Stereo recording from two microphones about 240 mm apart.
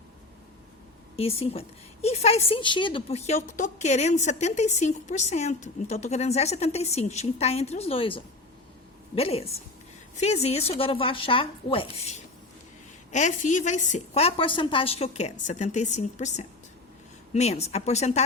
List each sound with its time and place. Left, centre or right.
1.1 s a woman's voice: left